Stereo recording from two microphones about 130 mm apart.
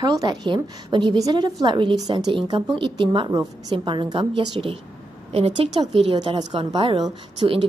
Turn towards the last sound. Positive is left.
turn(degrees=-40)  # may be behind; listen again after turning